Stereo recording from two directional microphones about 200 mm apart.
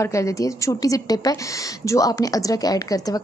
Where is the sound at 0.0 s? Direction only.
15° left (ahead or behind).